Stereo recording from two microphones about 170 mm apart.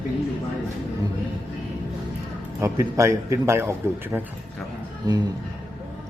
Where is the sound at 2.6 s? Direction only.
15° right (ahead or behind).